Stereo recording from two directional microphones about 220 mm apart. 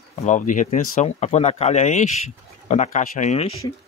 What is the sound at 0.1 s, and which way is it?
Speech, 30° left (ahead or behind).